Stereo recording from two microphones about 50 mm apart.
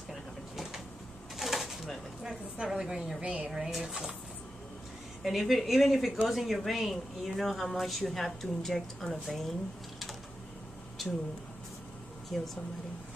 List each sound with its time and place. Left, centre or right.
0.1 s a sound: centre
1.3 s bird: centre
2.5 s a woman's voice: centre
5.2 s speech: centre
12.3 s speech: centre